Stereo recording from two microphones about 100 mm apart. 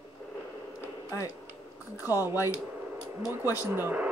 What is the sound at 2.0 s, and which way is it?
Speech, 25° right (ahead or behind).